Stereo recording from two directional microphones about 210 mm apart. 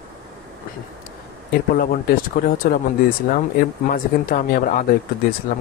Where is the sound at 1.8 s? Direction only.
45° left (ahead or behind).